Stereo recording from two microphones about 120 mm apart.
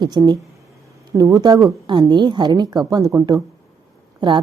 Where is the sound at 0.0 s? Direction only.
35° right (ahead or behind).